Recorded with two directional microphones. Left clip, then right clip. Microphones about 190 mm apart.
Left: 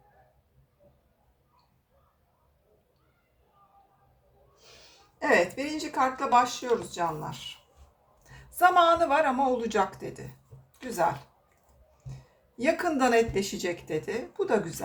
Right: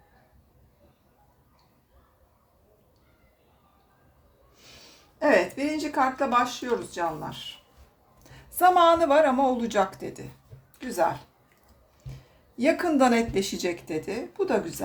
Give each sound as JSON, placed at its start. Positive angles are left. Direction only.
{"t": 4.6, "sound": "speech", "side_deg": -25}
{"t": 8.2, "sound": "speech", "side_deg": -30}
{"t": 12.6, "sound": "speech", "side_deg": -30}